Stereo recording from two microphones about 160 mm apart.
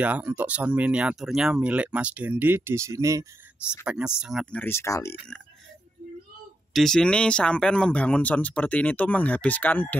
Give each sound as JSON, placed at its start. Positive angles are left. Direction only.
{"t": 0.0, "sound": "speech", "side_deg": -10}
{"t": 3.8, "sound": "speech", "side_deg": -5}
{"t": 4.6, "sound": "speech", "side_deg": 15}
{"t": 6.7, "sound": "speech", "side_deg": 5}